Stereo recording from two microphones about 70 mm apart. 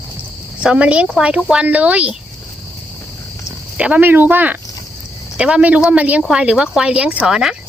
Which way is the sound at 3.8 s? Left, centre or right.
Right.